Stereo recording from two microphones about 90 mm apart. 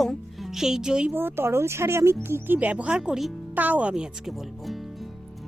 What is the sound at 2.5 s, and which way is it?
Speech, 15° right (ahead or behind).